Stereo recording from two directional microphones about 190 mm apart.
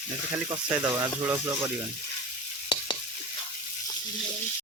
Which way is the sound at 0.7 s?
10° right (ahead or behind).